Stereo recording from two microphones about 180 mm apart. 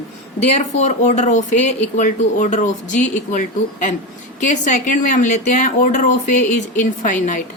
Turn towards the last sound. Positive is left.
turn(degrees=45)  # may be behind; listen again after turning